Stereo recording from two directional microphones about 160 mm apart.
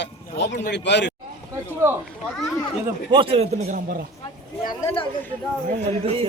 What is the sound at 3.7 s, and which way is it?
Speech, 60° right (ahead or behind).